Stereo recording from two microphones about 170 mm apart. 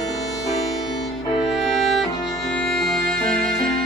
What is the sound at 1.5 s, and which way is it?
Music, centre (ahead or behind).